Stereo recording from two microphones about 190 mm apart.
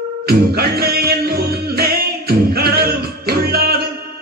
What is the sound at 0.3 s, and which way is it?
Music, 55° right (ahead or behind).